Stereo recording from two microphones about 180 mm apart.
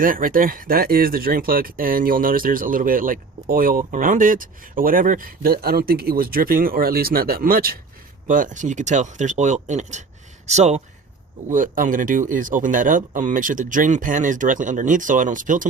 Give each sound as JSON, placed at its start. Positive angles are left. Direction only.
{"t": 0.0, "sound": "speech", "side_deg": -50}